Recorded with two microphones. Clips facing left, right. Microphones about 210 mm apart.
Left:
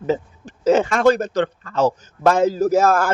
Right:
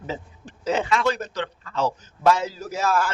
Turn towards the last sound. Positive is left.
turn(degrees=50)  # may be behind; listen again after turning